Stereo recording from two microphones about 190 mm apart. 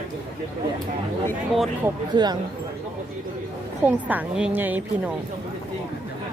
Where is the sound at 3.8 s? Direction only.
10° right (ahead or behind).